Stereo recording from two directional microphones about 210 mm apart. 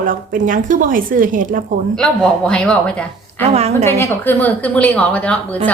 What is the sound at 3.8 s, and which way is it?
A woman's voice, 10° left (ahead or behind).